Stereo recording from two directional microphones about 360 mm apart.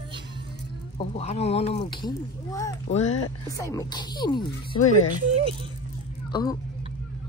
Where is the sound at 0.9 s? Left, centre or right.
Centre.